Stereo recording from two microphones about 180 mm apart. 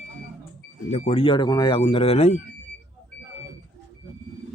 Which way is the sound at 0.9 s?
35° left (ahead or behind).